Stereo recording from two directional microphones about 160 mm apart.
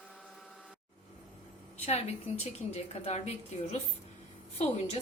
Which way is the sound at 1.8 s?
40° left (ahead or behind).